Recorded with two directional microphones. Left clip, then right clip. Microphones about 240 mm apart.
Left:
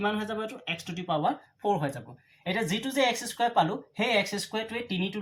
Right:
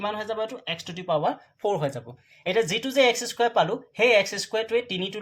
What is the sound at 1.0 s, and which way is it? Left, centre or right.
Speech, right.